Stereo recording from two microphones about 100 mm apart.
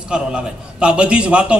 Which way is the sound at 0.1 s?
10° right (ahead or behind).